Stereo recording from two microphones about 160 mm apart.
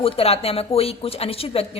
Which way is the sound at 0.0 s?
40° left (ahead or behind).